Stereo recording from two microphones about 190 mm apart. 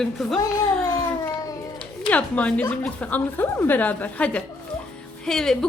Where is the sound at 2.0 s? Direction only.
5° left (ahead or behind).